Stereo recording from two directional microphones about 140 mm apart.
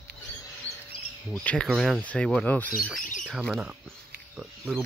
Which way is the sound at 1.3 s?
5° left (ahead or behind).